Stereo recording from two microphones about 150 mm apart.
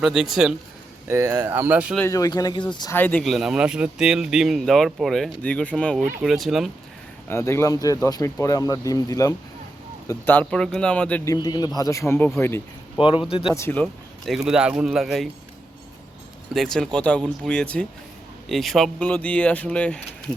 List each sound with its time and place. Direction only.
0.0 s speech: 5° right (ahead or behind)
1.0 s speech: 15° right (ahead or behind)
2.0 s speech: 20° left (ahead or behind)
2.9 s speech: 10° left (ahead or behind)
3.2 s speech: centre (ahead or behind)
7.3 s speech: 20° left (ahead or behind)
11.3 s speech: 25° left (ahead or behind)
13.0 s a man's voice: 35° left (ahead or behind)
13.5 s speech: 15° left (ahead or behind)
13.8 s speech: centre (ahead or behind)
16.6 s speech: 5° left (ahead or behind)